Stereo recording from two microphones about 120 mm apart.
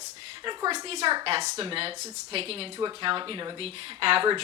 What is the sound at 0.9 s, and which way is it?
A woman's voice, 55° right (ahead or behind).